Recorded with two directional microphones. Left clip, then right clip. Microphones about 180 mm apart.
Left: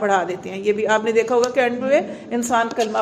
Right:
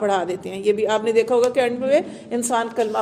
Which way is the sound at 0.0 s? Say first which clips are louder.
Left 2 dB; 40° right (ahead or behind).